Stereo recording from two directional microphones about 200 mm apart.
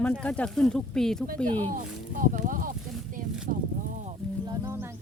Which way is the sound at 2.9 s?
5° right (ahead or behind).